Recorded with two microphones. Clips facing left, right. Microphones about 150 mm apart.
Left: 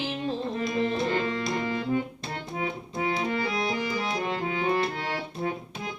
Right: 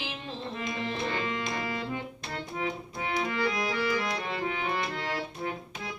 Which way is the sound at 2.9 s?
30° left (ahead or behind).